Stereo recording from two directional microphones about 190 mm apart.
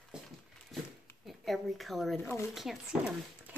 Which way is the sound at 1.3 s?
Centre (ahead or behind).